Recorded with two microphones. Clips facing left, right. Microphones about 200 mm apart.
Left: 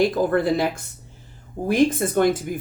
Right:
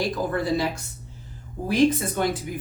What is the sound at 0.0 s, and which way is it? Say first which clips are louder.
Speech: left 6 dB; 55° left (ahead or behind).